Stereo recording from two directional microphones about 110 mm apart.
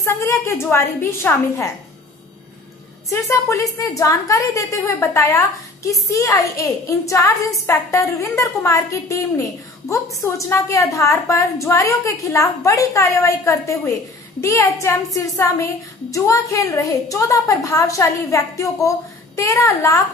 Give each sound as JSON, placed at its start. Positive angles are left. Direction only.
{"t": 0.0, "sound": "a woman's voice", "side_deg": 20}
{"t": 3.1, "sound": "a woman's voice", "side_deg": 25}